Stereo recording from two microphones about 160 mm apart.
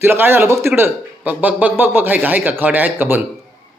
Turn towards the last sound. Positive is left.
turn(degrees=-10)  # may be behind; listen again after turning